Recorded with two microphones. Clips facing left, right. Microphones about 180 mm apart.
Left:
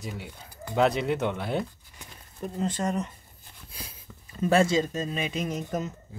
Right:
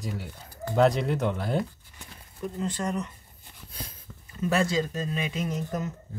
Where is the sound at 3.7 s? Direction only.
10° left (ahead or behind).